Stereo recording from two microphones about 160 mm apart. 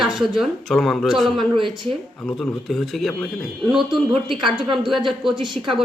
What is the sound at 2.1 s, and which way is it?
Speech, centre (ahead or behind).